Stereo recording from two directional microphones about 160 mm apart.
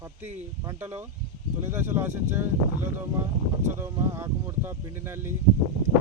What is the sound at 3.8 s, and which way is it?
Speech, 15° right (ahead or behind).